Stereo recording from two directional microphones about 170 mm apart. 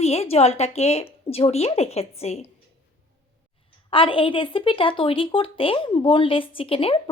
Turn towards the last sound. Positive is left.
turn(degrees=30)  # may be behind; listen again after turning